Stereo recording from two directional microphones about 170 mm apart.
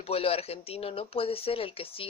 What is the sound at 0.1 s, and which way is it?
Speech, 35° left (ahead or behind).